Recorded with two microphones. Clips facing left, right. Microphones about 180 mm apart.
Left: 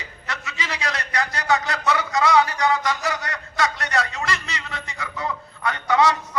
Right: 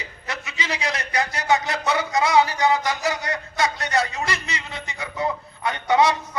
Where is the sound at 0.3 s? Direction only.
20° right (ahead or behind).